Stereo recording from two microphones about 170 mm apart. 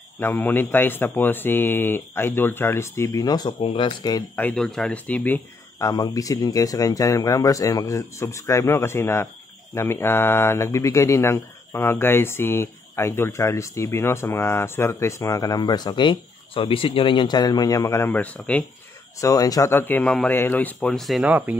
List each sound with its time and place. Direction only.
0.2 s speech: 10° left (ahead or behind)
4.4 s speech: 5° left (ahead or behind)
5.8 s speech: 20° left (ahead or behind)
19.1 s speech: 20° left (ahead or behind); by 21.5 s 10° right (ahead or behind)